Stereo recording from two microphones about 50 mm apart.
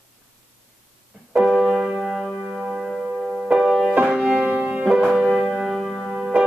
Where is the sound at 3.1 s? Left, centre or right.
Centre.